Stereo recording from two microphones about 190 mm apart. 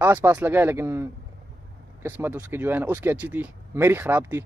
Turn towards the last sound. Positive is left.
turn(degrees=-10)  # may be behind; listen again after turning